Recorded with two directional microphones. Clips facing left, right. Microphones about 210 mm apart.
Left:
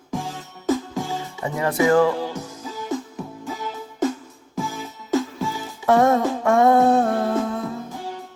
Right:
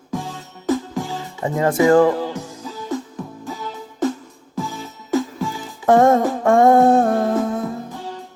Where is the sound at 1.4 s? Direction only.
45° right (ahead or behind).